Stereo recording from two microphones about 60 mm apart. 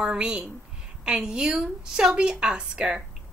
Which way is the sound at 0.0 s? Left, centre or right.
Centre.